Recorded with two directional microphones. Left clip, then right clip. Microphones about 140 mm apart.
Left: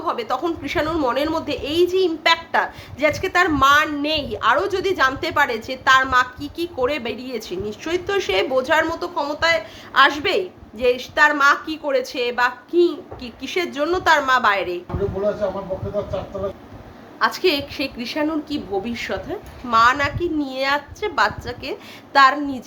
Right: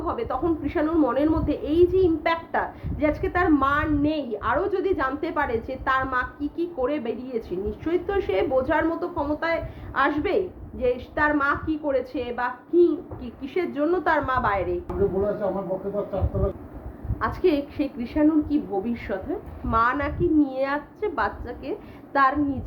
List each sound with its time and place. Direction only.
0.0 s a woman's voice: 15° left (ahead or behind)
17.2 s a woman's voice: 15° left (ahead or behind)